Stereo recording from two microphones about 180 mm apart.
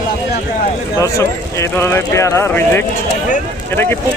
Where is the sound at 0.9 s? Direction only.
15° left (ahead or behind).